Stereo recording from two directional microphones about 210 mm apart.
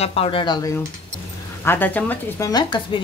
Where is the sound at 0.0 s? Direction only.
25° left (ahead or behind).